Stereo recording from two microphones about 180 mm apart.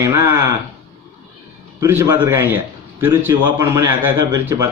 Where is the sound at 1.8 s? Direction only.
15° right (ahead or behind).